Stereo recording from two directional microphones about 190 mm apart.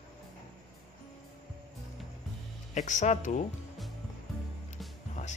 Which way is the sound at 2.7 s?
40° left (ahead or behind).